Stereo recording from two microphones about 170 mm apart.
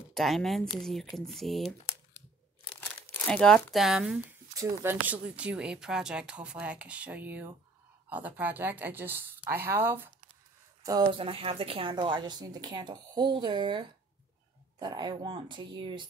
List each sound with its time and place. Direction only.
0.1 s speech: centre (ahead or behind)
3.3 s speech: 5° left (ahead or behind); by 10.1 s 10° right (ahead or behind)
10.8 s a sound: 20° right (ahead or behind)
11.1 s a woman's voice: 35° right (ahead or behind)